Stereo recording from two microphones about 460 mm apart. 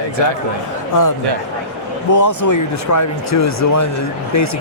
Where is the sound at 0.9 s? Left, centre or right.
Left.